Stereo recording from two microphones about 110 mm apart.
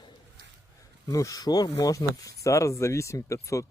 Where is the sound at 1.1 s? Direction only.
30° left (ahead or behind).